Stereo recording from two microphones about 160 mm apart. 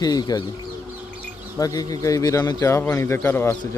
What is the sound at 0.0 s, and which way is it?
Speech, 25° left (ahead or behind).